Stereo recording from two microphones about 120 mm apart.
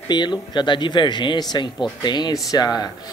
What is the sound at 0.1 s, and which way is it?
Speech, 35° left (ahead or behind).